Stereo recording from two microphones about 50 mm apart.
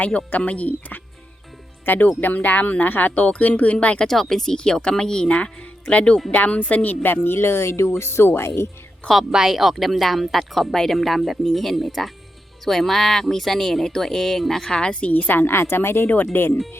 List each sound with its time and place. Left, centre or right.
0.3 s speech: left
4.0 s speech: centre
5.9 s speech: left
7.0 s speech: left
9.3 s speech: centre
15.1 s a woman's voice: left
16.0 s speech: left